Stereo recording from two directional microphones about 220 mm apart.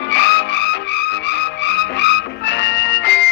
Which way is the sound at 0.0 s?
55° left (ahead or behind).